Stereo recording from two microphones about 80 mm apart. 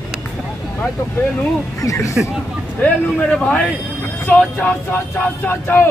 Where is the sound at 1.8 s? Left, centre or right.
Left.